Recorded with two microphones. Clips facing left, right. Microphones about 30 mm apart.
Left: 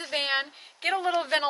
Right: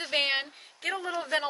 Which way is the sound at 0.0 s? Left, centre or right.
Centre.